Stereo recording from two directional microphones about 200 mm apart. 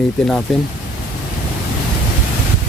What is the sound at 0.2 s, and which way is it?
Speech, 5° left (ahead or behind).